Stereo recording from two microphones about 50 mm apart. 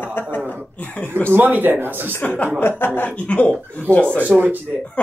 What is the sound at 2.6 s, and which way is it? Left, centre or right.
Speech, left.